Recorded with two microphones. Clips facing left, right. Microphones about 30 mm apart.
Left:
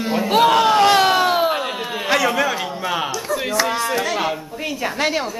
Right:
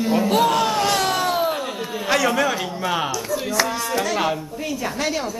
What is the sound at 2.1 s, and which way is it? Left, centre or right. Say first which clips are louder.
A man's voice: left 1 dB; centre.